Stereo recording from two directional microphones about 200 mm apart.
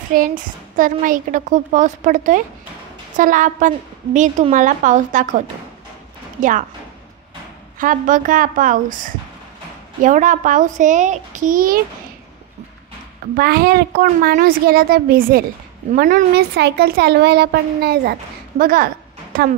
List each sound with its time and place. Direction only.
0.1 s a woman's voice: 45° right (ahead or behind)
7.8 s a woman's voice: 40° right (ahead or behind)
13.4 s speech: 50° right (ahead or behind)